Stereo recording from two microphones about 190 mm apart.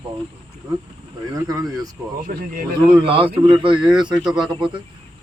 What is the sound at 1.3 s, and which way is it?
Speech, 20° right (ahead or behind).